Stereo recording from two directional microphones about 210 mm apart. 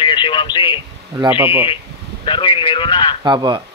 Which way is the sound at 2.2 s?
25° left (ahead or behind).